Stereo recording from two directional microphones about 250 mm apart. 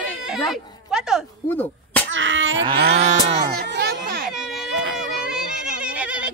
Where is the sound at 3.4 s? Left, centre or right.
Right.